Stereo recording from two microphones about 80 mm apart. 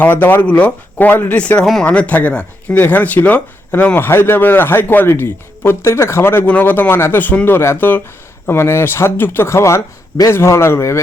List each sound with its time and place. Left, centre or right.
0.0 s speech: left